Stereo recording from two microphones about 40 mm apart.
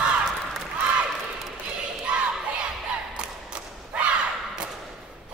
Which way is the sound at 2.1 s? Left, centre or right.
Right.